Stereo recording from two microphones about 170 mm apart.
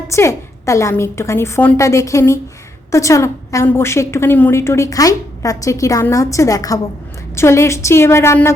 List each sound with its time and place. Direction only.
0.1 s a woman's voice: 15° left (ahead or behind)